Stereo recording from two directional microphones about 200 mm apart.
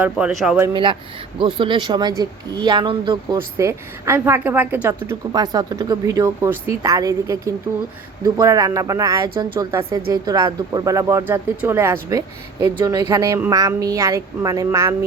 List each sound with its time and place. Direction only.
0.0 s speech: 5° right (ahead or behind)
0.7 s speech: 25° right (ahead or behind)